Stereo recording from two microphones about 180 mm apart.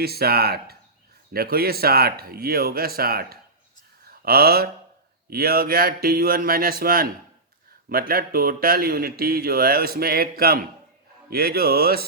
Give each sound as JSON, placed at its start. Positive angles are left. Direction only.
{"t": 0.0, "sound": "speech", "side_deg": -60}